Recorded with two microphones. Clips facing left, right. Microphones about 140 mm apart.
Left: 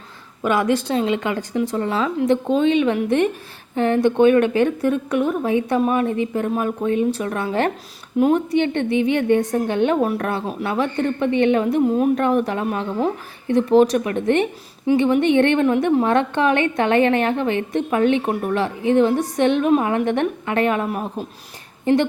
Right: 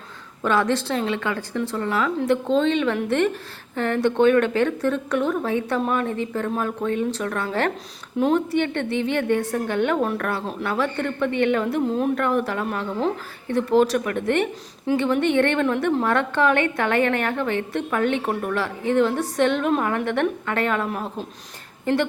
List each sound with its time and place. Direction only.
0.4 s a woman's voice: 10° left (ahead or behind)